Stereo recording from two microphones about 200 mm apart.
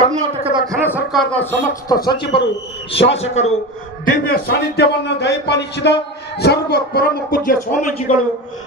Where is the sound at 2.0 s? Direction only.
25° left (ahead or behind).